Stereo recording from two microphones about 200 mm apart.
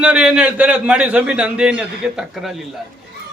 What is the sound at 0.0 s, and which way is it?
A man's voice, 5° right (ahead or behind).